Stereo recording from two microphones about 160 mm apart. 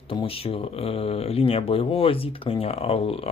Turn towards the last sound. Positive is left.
turn(degrees=35)  # may be behind; listen again after turning